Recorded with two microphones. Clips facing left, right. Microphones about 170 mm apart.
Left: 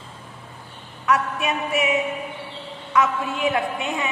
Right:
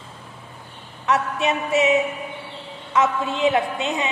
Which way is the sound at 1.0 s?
25° right (ahead or behind).